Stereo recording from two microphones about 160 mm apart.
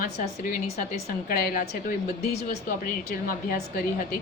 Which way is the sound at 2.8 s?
60° left (ahead or behind).